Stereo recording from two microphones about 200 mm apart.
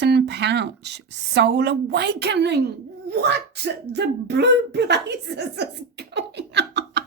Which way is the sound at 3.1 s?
55° right (ahead or behind).